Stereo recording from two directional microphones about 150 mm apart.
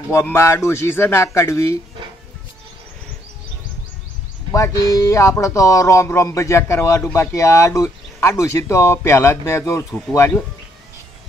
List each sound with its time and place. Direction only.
0.1 s a man's voice: 15° left (ahead or behind)
4.5 s a man's voice: 20° left (ahead or behind)